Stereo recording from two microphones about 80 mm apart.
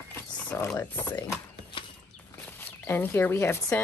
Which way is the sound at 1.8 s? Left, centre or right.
Left.